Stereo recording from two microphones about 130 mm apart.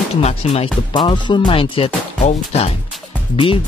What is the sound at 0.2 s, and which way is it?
Speech, 55° left (ahead or behind).